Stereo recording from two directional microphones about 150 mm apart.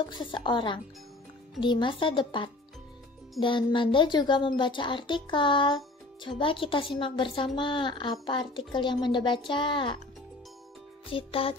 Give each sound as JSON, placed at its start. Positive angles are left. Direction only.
{"t": 0.1, "sound": "a woman's voice", "side_deg": 35}
{"t": 11.1, "sound": "a woman's voice", "side_deg": 35}